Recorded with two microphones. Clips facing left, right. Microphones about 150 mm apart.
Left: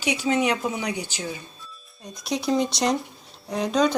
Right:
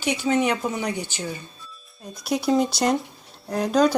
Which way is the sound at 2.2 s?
5° right (ahead or behind).